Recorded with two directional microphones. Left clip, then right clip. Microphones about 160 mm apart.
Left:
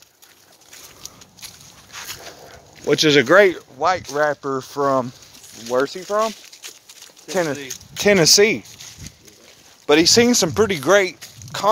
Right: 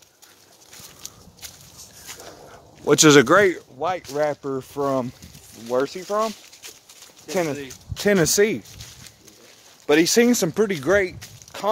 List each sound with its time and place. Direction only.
1.0 s a sound: 10° right (ahead or behind)
3.0 s speech: 40° right (ahead or behind)
3.3 s speech: centre (ahead or behind)
5.7 s speech: 5° left (ahead or behind)
7.2 s speech: centre (ahead or behind)
10.0 s speech: 10° right (ahead or behind)
11.5 s a sound: 10° left (ahead or behind)